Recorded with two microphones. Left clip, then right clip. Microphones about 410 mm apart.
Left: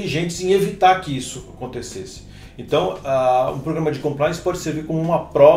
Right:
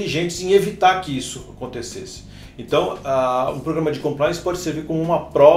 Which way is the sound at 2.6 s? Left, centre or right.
Left.